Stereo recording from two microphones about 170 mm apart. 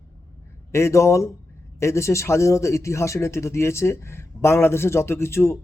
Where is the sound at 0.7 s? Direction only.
15° left (ahead or behind).